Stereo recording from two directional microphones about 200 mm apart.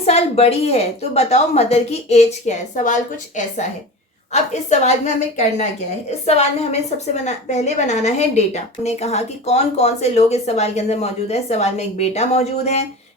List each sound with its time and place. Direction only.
0.0 s a woman's voice: 30° left (ahead or behind)